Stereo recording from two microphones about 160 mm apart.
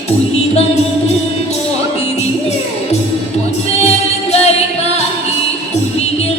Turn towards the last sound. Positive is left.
turn(degrees=40)  # may be behind; listen again after turning